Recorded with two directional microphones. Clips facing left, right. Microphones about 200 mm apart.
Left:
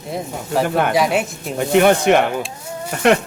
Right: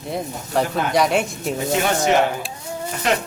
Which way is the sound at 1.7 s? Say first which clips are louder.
Left 7 dB; 60° left (ahead or behind).